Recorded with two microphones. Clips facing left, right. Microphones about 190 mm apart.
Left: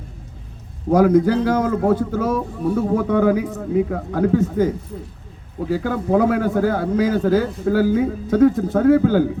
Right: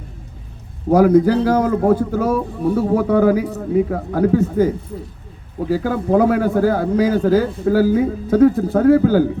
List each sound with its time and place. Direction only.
0.9 s a man's voice: 35° right (ahead or behind)